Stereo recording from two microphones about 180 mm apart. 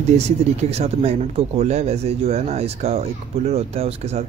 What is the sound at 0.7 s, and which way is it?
Speech, 35° right (ahead or behind).